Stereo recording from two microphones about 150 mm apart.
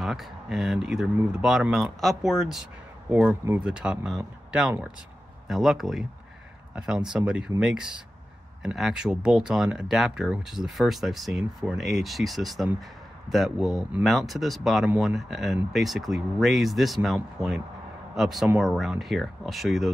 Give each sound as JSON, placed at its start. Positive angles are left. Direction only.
{"t": 0.0, "sound": "speech", "side_deg": 0}
{"t": 7.1, "sound": "speech", "side_deg": -5}